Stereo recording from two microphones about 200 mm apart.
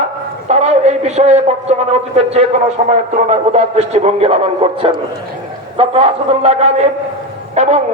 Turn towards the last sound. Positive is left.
turn(degrees=-35)  # may be behind; listen again after turning